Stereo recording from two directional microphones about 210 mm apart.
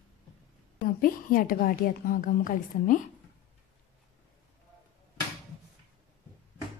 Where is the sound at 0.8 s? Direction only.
40° left (ahead or behind).